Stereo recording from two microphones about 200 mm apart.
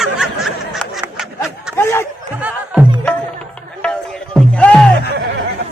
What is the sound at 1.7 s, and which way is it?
Speech, 10° left (ahead or behind).